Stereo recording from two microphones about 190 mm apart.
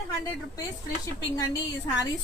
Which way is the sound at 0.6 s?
20° left (ahead or behind).